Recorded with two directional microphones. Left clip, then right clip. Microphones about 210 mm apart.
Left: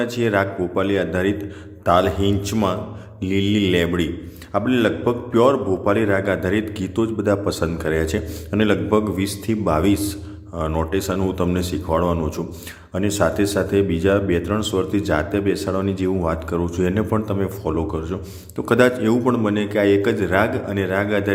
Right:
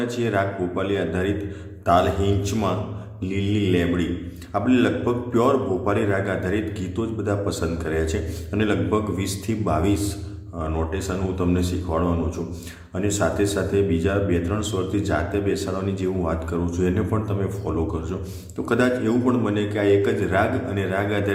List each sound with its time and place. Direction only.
0.0 s a man's voice: 30° left (ahead or behind)